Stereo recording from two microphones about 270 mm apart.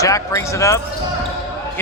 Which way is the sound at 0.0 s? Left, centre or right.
Centre.